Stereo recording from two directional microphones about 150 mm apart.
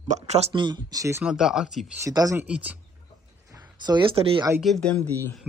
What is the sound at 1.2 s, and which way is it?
Speech, 5° right (ahead or behind).